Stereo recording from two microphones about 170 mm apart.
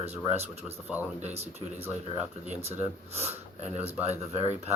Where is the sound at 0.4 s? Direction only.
5° right (ahead or behind).